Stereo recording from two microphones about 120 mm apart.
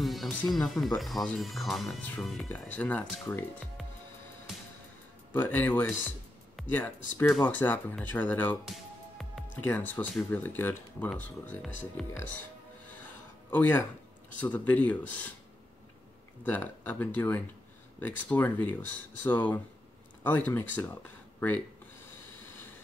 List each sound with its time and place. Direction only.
0.0 s music: centre (ahead or behind)
0.5 s speech: centre (ahead or behind)
2.7 s speech: 15° left (ahead or behind)
5.3 s speech: 15° left (ahead or behind)
9.6 s speech: 15° left (ahead or behind)
12.0 s speech: 5° left (ahead or behind)
13.5 s speech: 15° left (ahead or behind)
16.4 s speech: 15° left (ahead or behind)